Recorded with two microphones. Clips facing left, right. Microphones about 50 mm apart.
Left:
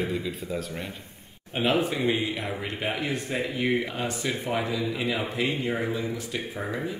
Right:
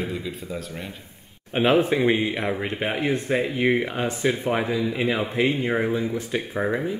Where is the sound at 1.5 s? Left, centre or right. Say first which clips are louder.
Right 6 dB; right.